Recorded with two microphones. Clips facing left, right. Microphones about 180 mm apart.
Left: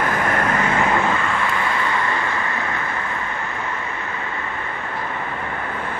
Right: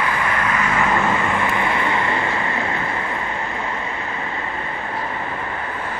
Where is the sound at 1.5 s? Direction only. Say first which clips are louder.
Right 2 dB; 20° right (ahead or behind).